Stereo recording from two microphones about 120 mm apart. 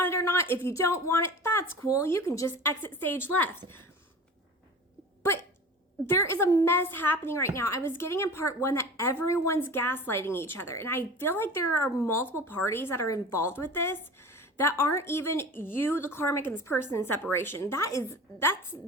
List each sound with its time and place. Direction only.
0.0 s a woman's voice: 20° left (ahead or behind)
6.1 s a woman's voice: 20° left (ahead or behind)